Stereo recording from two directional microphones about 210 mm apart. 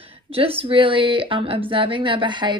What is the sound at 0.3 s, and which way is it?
A woman's voice, 25° right (ahead or behind).